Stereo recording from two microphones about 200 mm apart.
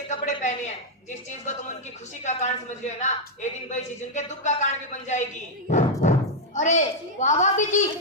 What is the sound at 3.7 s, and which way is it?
Speech, 35° left (ahead or behind).